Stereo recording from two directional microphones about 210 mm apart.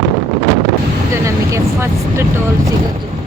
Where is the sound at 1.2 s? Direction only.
15° right (ahead or behind).